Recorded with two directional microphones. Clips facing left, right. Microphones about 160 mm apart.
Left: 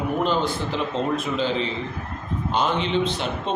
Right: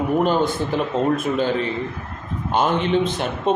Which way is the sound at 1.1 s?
50° right (ahead or behind).